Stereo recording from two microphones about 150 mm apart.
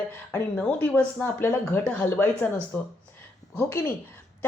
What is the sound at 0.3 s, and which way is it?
Speech, 10° left (ahead or behind).